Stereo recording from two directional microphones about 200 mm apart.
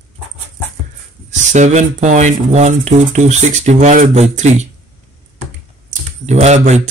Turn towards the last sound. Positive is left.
turn(degrees=-35)  # may be behind; listen again after turning